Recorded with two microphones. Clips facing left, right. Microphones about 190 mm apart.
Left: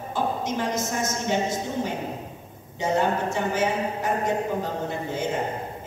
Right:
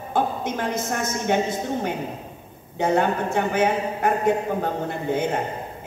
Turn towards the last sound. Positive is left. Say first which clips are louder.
# right 4 dB
turn(degrees=-55)  # may be behind; listen again after turning